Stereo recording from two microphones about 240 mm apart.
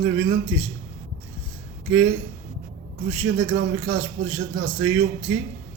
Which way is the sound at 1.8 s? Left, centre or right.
Right.